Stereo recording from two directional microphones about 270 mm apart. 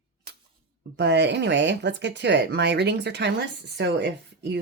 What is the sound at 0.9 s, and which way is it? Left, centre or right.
Speech, right.